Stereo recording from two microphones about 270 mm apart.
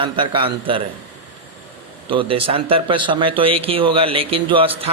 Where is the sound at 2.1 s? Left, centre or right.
Centre.